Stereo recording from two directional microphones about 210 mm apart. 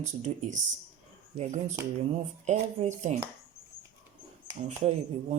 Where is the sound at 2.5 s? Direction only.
35° right (ahead or behind).